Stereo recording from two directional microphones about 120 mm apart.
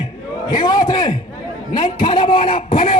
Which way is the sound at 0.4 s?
35° left (ahead or behind).